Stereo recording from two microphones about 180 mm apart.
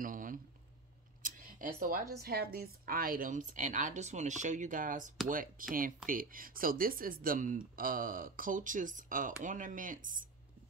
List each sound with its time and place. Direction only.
0.0 s a sound: 50° right (ahead or behind)
1.2 s tick-tock: 50° right (ahead or behind)
1.8 s speech: 50° right (ahead or behind)